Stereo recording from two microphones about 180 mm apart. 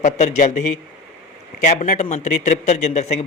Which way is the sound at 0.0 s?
40° left (ahead or behind).